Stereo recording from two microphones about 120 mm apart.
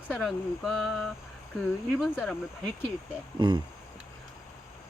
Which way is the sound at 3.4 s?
40° right (ahead or behind).